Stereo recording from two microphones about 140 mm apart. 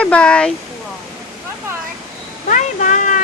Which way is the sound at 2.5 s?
65° left (ahead or behind).